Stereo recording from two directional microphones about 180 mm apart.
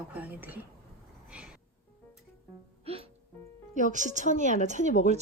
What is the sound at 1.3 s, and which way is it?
Music, 5° right (ahead or behind).